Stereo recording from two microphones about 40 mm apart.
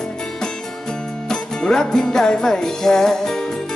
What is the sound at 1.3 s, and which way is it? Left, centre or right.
Music, centre.